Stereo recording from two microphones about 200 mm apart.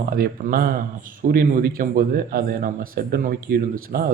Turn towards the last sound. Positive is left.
turn(degrees=-45)  # may be behind; listen again after turning